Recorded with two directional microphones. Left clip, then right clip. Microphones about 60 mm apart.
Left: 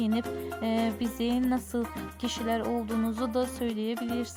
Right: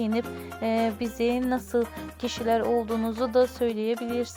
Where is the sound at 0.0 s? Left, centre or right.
Right.